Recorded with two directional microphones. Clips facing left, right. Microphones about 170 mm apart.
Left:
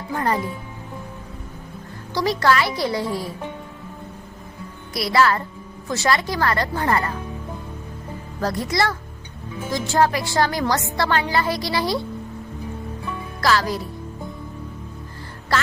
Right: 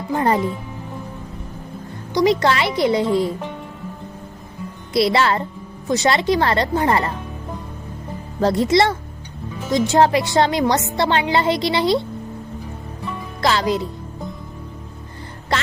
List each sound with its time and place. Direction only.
0.1 s a woman's voice: 25° right (ahead or behind)
2.1 s a woman's voice: 20° right (ahead or behind)
4.9 s a woman's voice: 25° right (ahead or behind)
8.4 s a woman's voice: 25° right (ahead or behind)
13.4 s a woman's voice: 20° right (ahead or behind)